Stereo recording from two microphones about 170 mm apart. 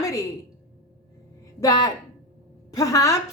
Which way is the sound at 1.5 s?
20° left (ahead or behind).